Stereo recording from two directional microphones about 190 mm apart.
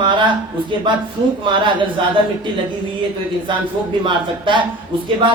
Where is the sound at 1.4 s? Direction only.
25° right (ahead or behind).